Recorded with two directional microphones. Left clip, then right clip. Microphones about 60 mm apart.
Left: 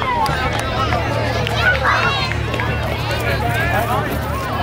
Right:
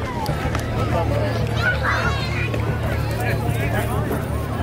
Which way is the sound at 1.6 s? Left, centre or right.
Centre.